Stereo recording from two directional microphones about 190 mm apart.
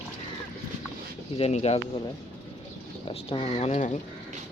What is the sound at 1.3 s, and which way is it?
Speech, 30° left (ahead or behind).